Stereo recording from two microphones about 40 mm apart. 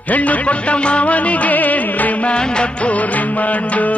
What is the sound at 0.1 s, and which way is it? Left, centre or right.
Music of bollywood, left.